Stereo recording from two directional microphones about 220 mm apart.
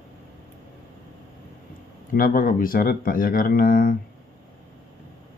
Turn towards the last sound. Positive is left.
turn(degrees=40)  # may be behind; listen again after turning